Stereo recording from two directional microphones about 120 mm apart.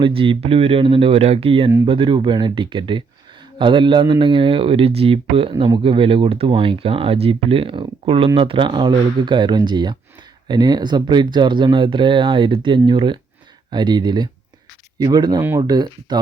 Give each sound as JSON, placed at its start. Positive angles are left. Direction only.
{"t": 0.0, "sound": "speech", "side_deg": -50}
{"t": 15.4, "sound": "speech", "side_deg": -20}
{"t": 15.6, "sound": "speech", "side_deg": -35}